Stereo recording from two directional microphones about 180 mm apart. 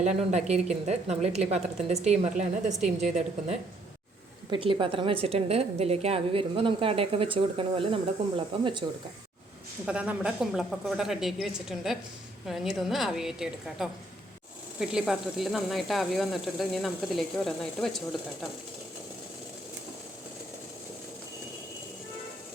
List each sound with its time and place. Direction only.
0.0 s a woman's voice: 40° right (ahead or behind)
9.8 s speech: 5° right (ahead or behind)